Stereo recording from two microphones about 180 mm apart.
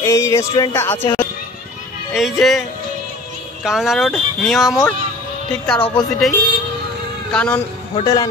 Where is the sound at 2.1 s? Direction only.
Centre (ahead or behind).